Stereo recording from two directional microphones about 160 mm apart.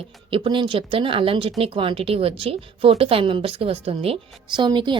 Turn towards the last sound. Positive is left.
turn(degrees=-30)  # may be behind; listen again after turning